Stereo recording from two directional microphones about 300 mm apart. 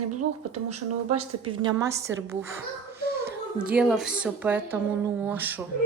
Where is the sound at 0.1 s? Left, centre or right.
Right.